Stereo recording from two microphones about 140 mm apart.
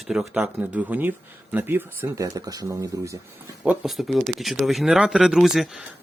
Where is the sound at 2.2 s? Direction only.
25° right (ahead or behind).